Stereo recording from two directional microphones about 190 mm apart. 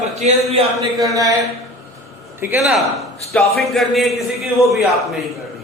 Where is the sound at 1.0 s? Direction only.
15° right (ahead or behind).